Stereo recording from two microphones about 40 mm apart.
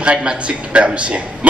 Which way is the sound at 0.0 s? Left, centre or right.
Right.